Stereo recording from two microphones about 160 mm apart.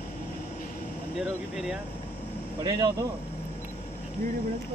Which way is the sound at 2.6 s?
25° right (ahead or behind).